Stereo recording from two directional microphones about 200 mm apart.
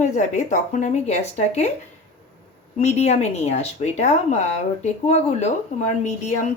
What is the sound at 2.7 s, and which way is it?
Speech, 30° left (ahead or behind).